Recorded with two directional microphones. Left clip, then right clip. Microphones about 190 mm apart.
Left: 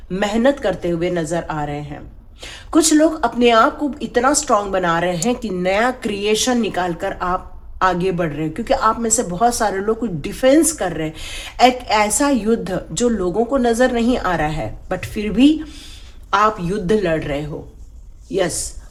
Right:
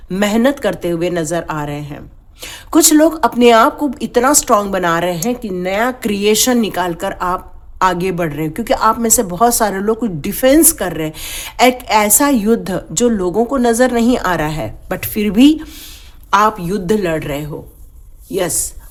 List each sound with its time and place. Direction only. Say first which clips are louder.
0.1 s speech: right 2 dB; 35° right (ahead or behind)
5.2 s speech: even; 20° right (ahead or behind)